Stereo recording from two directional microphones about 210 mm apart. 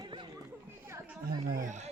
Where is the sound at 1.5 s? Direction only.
35° right (ahead or behind).